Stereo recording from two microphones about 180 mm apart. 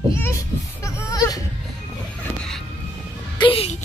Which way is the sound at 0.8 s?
15° left (ahead or behind).